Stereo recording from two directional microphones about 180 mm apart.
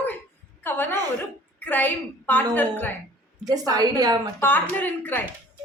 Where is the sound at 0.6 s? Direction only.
10° left (ahead or behind).